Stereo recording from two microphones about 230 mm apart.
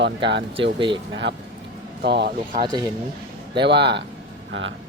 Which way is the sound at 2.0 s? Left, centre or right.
Right.